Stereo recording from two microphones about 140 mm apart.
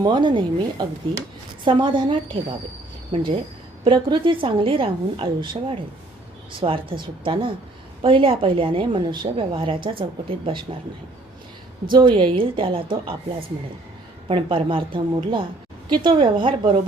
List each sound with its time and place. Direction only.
0.0 s a woman's voice: 35° right (ahead or behind)
11.9 s a woman's voice: 35° right (ahead or behind)
14.3 s a woman's voice: 40° right (ahead or behind)